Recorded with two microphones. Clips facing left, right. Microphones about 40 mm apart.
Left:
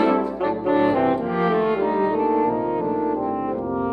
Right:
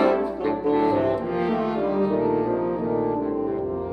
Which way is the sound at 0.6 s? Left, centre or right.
Left.